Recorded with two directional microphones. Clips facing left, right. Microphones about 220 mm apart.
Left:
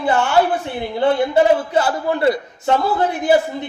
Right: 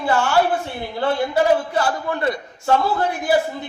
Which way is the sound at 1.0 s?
20° left (ahead or behind).